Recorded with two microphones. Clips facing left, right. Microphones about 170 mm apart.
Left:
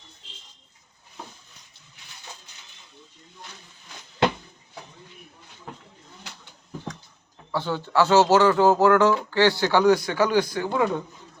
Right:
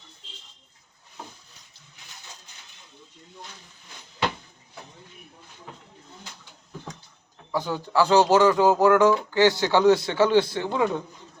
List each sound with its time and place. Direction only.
7.5 s speech: 15° right (ahead or behind)